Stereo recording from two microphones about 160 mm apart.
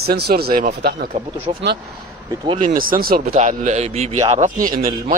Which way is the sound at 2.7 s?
60° right (ahead or behind).